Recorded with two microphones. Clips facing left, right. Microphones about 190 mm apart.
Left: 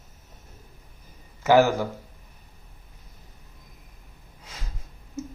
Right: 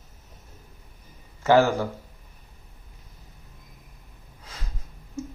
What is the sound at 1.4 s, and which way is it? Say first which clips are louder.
Speech: even; 15° left (ahead or behind).